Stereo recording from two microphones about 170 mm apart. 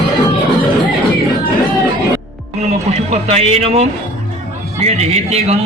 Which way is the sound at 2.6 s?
40° right (ahead or behind).